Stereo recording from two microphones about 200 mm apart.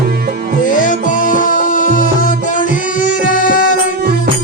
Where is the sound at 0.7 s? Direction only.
40° left (ahead or behind).